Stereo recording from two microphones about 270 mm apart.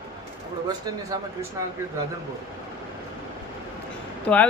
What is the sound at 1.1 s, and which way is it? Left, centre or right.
Speech, centre.